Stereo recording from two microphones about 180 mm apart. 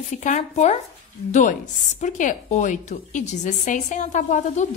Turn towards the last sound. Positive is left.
turn(degrees=40)  # may be behind; listen again after turning